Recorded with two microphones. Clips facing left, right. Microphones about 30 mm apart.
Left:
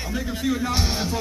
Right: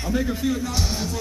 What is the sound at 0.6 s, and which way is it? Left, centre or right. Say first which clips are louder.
Speech: left 2 dB; left.